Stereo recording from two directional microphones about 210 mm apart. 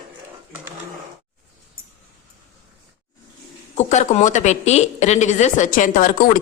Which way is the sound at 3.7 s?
35° left (ahead or behind).